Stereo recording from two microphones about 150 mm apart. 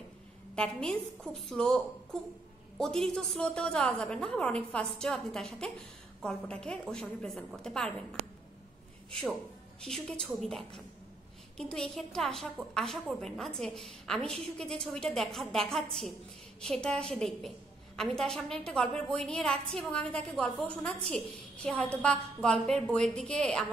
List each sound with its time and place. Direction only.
0.6 s a woman's voice: 5° left (ahead or behind)
2.8 s a woman's voice: 5° left (ahead or behind)
9.8 s a woman's voice: 5° left (ahead or behind)